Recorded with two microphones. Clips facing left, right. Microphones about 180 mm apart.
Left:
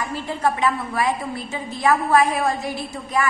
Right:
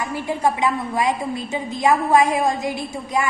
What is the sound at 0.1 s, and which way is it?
A woman's voice, 15° right (ahead or behind).